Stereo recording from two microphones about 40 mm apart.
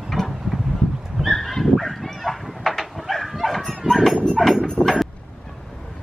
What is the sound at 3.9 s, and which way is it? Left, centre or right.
Livestock, centre.